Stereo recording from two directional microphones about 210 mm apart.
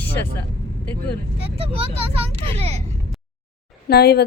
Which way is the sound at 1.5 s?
25° right (ahead or behind).